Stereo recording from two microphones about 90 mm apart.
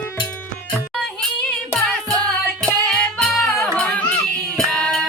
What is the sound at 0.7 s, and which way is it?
Music, centre (ahead or behind).